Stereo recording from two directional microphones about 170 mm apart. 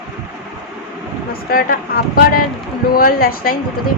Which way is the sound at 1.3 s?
60° left (ahead or behind).